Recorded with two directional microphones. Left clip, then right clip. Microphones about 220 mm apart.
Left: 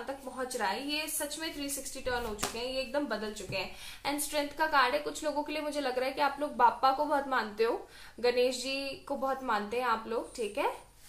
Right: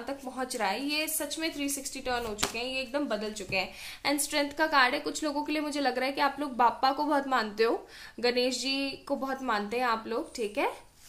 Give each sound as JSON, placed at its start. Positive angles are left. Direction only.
{"t": 0.4, "sound": "a woman's voice", "side_deg": -50}